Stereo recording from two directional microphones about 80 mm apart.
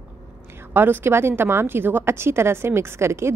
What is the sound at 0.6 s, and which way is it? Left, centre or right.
A woman's voice, right.